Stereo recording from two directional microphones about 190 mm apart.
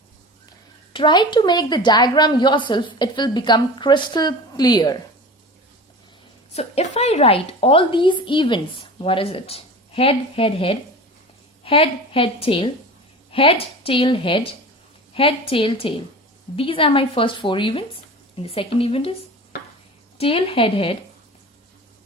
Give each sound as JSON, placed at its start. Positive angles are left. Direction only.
{"t": 0.9, "sound": "a woman's voice", "side_deg": 25}
{"t": 6.5, "sound": "a woman's voice", "side_deg": 35}
{"t": 20.1, "sound": "a woman's voice", "side_deg": 30}